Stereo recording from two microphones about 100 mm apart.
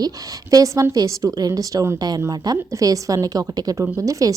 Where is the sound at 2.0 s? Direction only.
40° right (ahead or behind).